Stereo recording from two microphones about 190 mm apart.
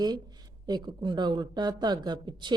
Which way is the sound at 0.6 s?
20° right (ahead or behind).